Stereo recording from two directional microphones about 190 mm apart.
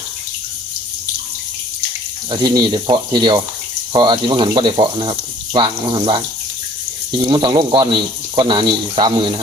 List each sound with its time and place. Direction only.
2.3 s speech: 25° right (ahead or behind)